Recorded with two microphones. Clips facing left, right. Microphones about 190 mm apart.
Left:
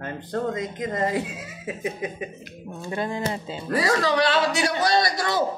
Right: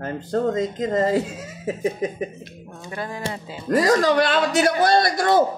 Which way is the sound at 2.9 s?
20° left (ahead or behind).